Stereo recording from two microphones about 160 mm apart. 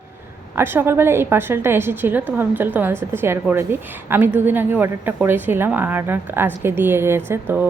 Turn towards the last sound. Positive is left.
turn(degrees=-15)  # may be behind; listen again after turning